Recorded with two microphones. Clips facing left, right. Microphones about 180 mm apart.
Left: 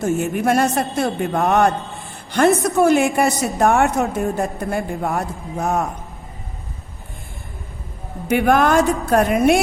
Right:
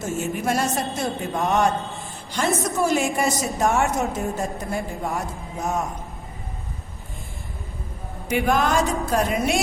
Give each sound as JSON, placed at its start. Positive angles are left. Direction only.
{"t": 0.0, "sound": "a woman's voice", "side_deg": 60}
{"t": 8.3, "sound": "a woman's voice", "side_deg": 55}